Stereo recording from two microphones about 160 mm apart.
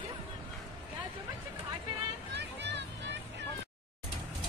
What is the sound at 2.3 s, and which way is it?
Music, 90° right.